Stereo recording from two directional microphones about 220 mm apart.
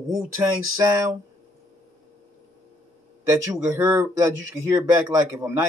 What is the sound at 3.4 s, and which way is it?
Speech, 15° right (ahead or behind).